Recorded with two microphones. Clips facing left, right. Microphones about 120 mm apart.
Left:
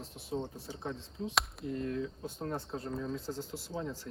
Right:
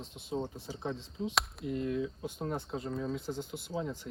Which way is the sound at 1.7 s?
10° right (ahead or behind).